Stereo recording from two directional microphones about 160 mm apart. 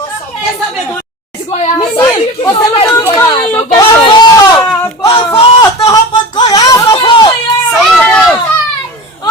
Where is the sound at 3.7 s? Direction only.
25° left (ahead or behind).